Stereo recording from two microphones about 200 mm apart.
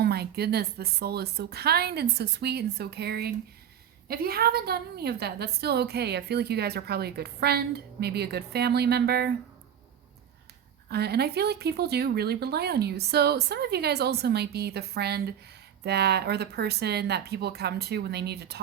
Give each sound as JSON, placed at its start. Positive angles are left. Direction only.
{"t": 0.0, "sound": "a woman's voice", "side_deg": -55}
{"t": 10.8, "sound": "a woman's voice", "side_deg": -55}